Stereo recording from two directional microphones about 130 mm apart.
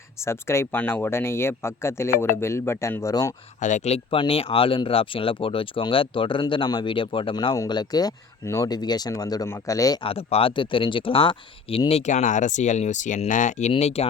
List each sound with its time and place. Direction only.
0.2 s speech: 20° left (ahead or behind)
3.6 s speech: 65° left (ahead or behind); by 10.0 s 25° left (ahead or behind)
10.0 s speech: 45° left (ahead or behind)